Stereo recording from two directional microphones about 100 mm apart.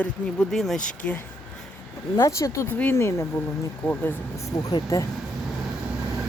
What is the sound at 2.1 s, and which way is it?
Speech, 30° left (ahead or behind).